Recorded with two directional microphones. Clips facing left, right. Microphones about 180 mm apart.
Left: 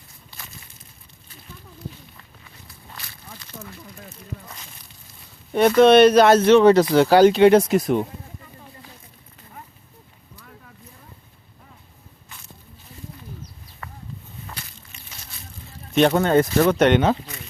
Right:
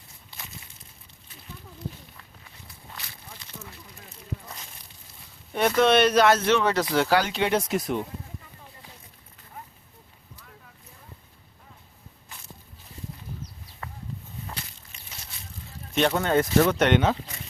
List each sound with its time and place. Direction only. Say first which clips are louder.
5.5 s speech: left 8 dB; 35° left (ahead or behind); by 8.0 s 55° left (ahead or behind)
16.0 s speech: left 6 dB; 40° left (ahead or behind)